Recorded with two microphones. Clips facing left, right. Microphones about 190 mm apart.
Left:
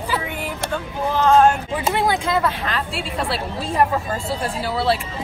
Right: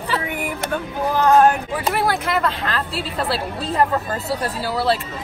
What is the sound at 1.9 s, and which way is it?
Speech, 20° left (ahead or behind).